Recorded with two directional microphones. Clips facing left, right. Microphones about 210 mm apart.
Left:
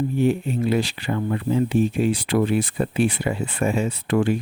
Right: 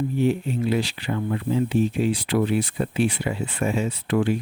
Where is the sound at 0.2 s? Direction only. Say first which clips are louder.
Left 1 dB; 50° left (ahead or behind).